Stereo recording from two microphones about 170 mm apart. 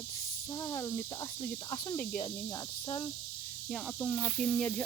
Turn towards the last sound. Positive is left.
turn(degrees=5)  # may be behind; listen again after turning